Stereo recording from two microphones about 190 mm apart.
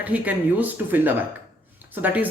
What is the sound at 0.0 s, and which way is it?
Speech, 10° right (ahead or behind).